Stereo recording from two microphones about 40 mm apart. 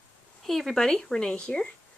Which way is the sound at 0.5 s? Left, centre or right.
Centre.